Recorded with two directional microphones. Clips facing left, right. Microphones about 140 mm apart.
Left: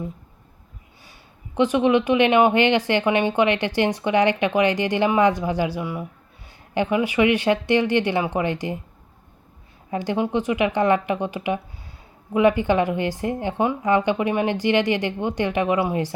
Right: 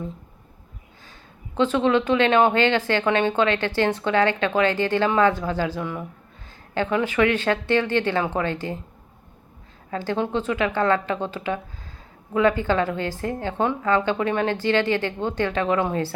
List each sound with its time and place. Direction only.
1.5 s speech: 15° left (ahead or behind)
9.9 s speech: 15° left (ahead or behind)